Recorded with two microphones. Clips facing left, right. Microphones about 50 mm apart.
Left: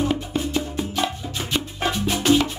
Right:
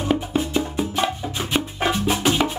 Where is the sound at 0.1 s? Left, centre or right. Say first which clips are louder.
Right 3 dB; centre.